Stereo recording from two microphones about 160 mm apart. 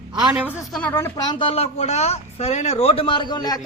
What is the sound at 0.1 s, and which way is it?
Speech, 30° right (ahead or behind).